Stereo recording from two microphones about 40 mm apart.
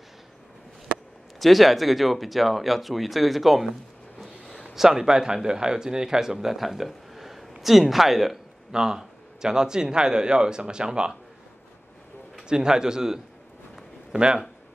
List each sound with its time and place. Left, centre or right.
1.4 s speech: centre
4.7 s a man's voice: centre
12.4 s a man's voice: centre